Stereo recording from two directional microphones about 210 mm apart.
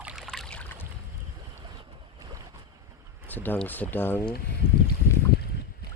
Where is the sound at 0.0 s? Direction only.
5° right (ahead or behind).